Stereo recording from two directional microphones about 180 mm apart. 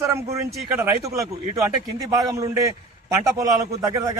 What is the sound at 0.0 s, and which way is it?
Speech, 15° right (ahead or behind).